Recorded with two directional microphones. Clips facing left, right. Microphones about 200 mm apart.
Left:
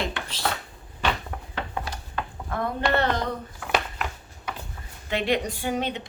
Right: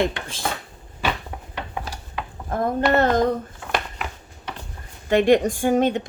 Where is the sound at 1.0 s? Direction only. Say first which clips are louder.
Right 1 dB; 10° right (ahead or behind).